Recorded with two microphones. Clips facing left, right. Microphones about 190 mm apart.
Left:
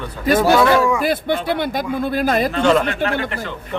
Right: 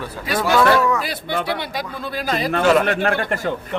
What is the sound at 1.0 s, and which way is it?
Speech, 50° left (ahead or behind).